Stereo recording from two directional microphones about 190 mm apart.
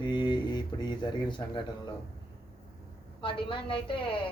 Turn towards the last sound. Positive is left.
turn(degrees=25)  # may be behind; listen again after turning